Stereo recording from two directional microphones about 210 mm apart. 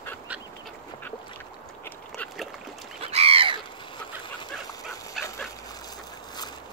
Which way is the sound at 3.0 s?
30° right (ahead or behind).